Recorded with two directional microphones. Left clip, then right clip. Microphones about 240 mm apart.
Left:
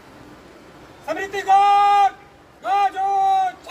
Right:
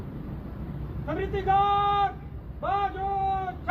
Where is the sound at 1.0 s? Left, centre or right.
Left.